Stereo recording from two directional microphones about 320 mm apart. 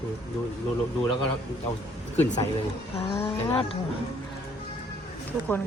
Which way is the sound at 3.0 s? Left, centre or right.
Centre.